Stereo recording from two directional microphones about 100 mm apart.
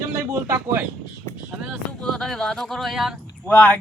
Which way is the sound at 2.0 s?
5° left (ahead or behind).